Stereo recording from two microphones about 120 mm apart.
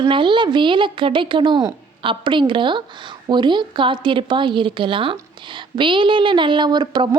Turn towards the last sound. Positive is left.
turn(degrees=-40)  # may be behind; listen again after turning